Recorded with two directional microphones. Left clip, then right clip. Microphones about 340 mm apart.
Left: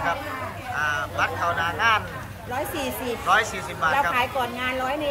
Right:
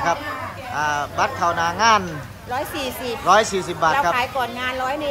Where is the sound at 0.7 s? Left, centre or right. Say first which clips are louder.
Right 3 dB; centre.